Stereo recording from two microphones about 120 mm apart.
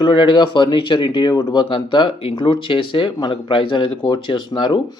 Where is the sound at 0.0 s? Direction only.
40° left (ahead or behind).